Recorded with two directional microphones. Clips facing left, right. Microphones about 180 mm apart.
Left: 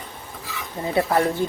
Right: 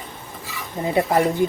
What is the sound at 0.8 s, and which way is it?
Speech, 15° right (ahead or behind).